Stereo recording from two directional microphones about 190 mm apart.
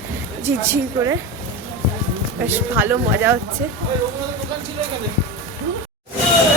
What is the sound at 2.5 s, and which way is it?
Speech, 10° right (ahead or behind).